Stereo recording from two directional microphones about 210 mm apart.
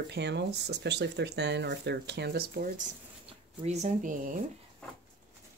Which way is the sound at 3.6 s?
35° right (ahead or behind).